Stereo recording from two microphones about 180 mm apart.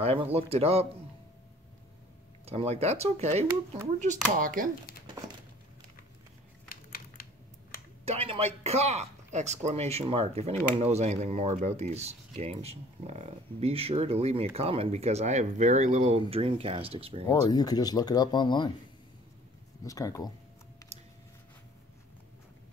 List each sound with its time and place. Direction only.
0.0 s speech: 35° right (ahead or behind)
2.4 s speech: 35° right (ahead or behind); by 4.6 s 50° right (ahead or behind)
6.7 s a sound: 55° left (ahead or behind)
8.1 s speech: 35° right (ahead or behind)
17.3 s speech: 20° left (ahead or behind)
19.8 s speech: 20° left (ahead or behind)